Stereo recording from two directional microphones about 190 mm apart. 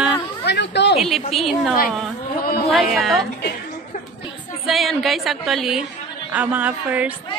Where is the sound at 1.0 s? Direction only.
Centre (ahead or behind).